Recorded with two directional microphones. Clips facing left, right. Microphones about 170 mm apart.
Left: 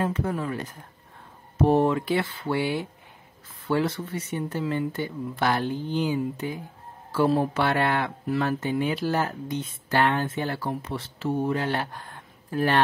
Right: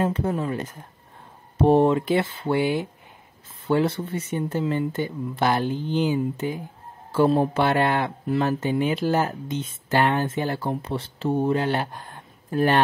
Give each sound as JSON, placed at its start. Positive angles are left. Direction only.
{"t": 0.0, "sound": "speech", "side_deg": -25}